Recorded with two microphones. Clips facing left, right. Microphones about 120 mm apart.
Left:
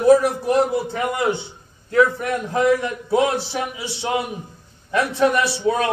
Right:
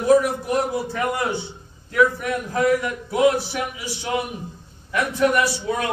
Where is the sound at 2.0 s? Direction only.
25° left (ahead or behind).